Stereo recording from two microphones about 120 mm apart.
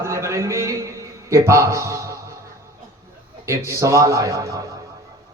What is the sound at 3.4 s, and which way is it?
A man's voice, 25° right (ahead or behind).